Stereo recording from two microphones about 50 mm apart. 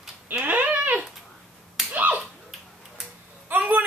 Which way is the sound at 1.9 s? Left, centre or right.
Right.